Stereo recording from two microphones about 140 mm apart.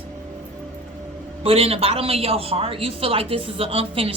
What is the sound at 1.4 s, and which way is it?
A woman's voice, 45° right (ahead or behind).